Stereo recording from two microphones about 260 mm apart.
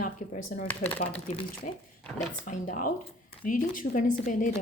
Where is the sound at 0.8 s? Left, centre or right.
Left.